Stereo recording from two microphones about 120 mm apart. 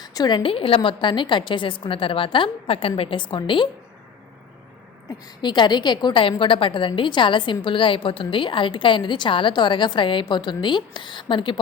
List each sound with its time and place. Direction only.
0.0 s a woman's voice: 35° left (ahead or behind)
5.4 s a woman's voice: 40° left (ahead or behind)